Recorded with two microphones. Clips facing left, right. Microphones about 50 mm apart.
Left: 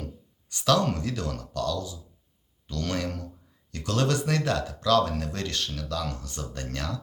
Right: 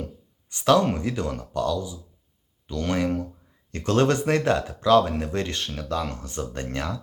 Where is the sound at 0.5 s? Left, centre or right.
Right.